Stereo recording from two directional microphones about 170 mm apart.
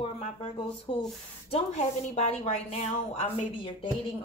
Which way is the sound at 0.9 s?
35° left (ahead or behind).